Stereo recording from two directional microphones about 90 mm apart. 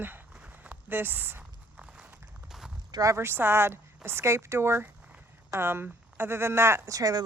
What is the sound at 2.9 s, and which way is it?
Speech, 40° right (ahead or behind).